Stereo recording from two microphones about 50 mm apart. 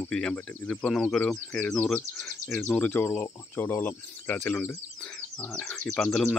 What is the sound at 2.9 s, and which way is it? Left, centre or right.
Speech, left.